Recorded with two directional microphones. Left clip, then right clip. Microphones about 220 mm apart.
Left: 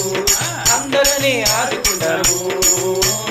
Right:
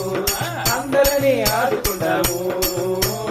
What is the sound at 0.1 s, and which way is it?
Music, 40° right (ahead or behind).